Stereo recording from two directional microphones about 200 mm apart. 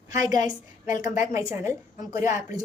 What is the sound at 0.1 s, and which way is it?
A woman's voice, 20° right (ahead or behind).